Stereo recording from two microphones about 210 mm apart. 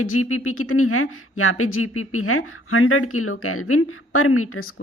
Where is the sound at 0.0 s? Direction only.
90° left.